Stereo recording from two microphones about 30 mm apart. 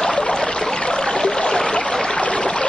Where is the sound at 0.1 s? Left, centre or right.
Left.